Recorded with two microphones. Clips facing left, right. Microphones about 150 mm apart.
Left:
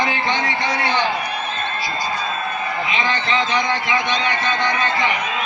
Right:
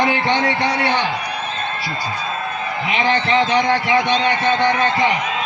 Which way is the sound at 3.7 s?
35° right (ahead or behind).